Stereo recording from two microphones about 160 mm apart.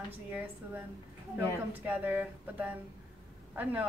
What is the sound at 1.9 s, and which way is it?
A woman's voice, 10° right (ahead or behind).